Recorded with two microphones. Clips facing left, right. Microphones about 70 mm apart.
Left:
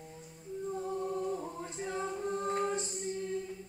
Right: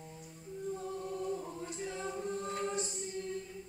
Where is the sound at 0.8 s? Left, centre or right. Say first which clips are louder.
Left 5 dB; left.